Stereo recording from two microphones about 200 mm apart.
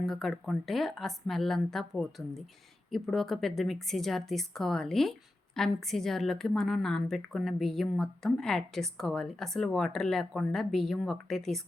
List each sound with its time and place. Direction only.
0.0 s a woman's voice: centre (ahead or behind)